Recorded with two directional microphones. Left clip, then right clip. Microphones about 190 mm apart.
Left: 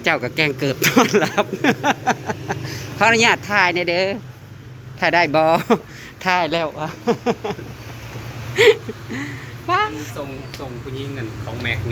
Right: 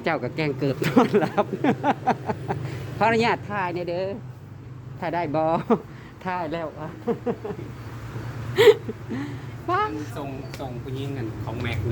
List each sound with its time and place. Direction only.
0.0 s speech: 5° right (ahead or behind)
3.5 s speech: 10° left (ahead or behind)
6.2 s speech: 15° left (ahead or behind)
8.5 s a woman's voice: 15° right (ahead or behind)